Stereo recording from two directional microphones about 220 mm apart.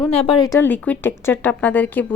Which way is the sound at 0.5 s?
10° left (ahead or behind).